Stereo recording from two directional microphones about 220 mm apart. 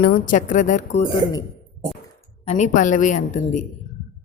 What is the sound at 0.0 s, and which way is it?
Speech, 35° left (ahead or behind).